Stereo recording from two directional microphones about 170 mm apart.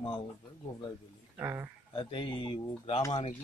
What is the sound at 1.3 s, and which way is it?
Speech, 15° right (ahead or behind).